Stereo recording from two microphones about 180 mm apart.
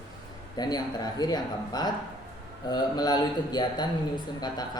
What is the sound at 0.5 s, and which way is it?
Speech, 20° left (ahead or behind).